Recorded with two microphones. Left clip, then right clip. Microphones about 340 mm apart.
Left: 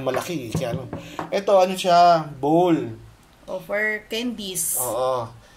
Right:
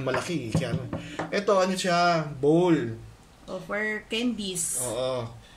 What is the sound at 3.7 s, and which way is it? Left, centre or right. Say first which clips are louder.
Speech: left 5 dB; centre.